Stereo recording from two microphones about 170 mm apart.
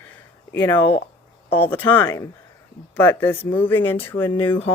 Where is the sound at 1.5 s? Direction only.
10° left (ahead or behind).